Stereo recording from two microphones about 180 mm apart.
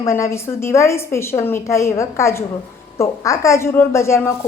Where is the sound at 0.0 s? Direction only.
15° left (ahead or behind).